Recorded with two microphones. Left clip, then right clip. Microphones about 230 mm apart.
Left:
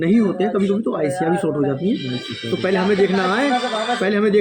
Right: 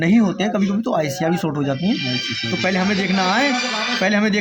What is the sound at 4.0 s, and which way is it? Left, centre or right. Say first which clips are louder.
Speech: right 1 dB; right.